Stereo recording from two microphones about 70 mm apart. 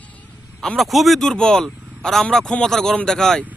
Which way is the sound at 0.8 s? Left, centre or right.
Centre.